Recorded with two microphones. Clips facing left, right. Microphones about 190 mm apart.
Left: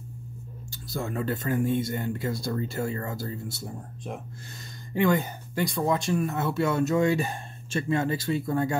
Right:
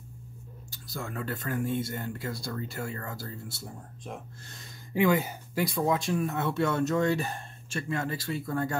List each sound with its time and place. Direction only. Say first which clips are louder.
0.7 s speech: left 6 dB; 25° left (ahead or behind)
4.6 s speech: left 1 dB; 5° right (ahead or behind); by 8.7 s 15° left (ahead or behind)